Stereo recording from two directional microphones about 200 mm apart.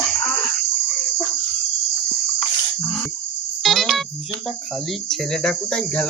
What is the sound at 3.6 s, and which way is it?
Music, centre (ahead or behind).